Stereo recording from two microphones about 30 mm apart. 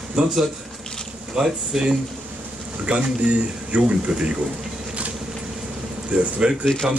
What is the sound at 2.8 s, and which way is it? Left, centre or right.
Speech, right.